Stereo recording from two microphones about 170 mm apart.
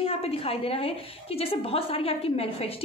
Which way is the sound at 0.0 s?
35° left (ahead or behind).